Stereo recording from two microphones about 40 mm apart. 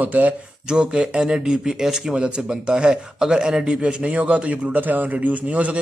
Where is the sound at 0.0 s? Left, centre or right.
Right.